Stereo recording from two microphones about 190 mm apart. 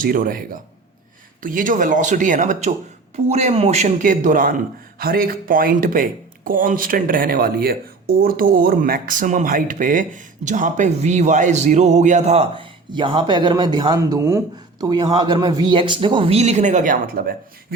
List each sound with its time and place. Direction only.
0.0 s a man's voice: 45° right (ahead or behind)